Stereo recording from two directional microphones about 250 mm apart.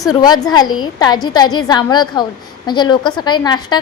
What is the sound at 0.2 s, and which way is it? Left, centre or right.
A woman's voice, centre.